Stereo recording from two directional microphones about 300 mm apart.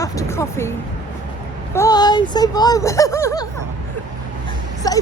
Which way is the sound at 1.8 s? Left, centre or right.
Centre.